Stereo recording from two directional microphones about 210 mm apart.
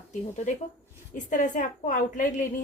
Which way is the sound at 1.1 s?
40° left (ahead or behind).